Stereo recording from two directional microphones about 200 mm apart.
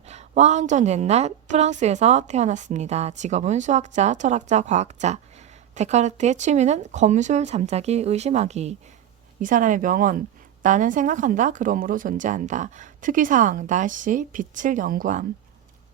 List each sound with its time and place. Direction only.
0.1 s a woman's voice: 35° right (ahead or behind)